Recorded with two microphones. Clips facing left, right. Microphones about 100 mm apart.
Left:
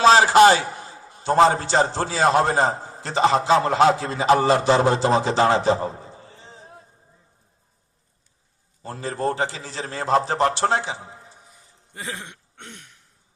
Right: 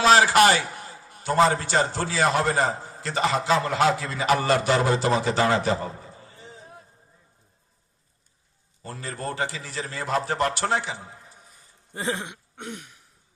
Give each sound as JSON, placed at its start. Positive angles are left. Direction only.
{"t": 0.0, "sound": "a man's voice", "side_deg": 25}
{"t": 8.9, "sound": "a man's voice", "side_deg": 25}
{"t": 11.9, "sound": "a sound", "side_deg": -25}